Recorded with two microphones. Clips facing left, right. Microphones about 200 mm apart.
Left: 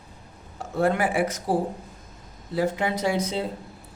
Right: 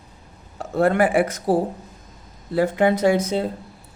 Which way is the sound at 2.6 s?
55° right (ahead or behind).